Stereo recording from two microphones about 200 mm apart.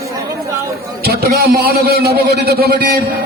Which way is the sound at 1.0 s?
50° right (ahead or behind).